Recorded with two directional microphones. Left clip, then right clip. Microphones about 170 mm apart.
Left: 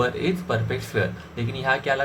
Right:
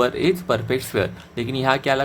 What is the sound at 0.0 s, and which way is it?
A man's voice, 55° right (ahead or behind).